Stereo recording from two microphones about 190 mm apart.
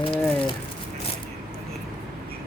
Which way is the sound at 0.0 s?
25° left (ahead or behind).